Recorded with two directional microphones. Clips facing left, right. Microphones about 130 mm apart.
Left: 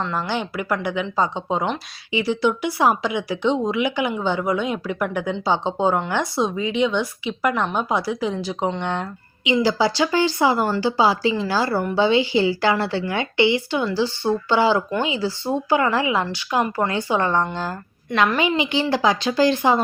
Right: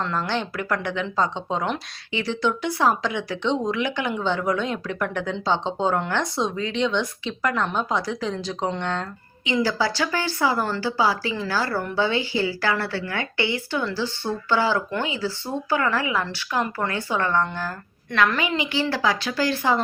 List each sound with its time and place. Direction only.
0.0 s a woman's voice: 5° left (ahead or behind)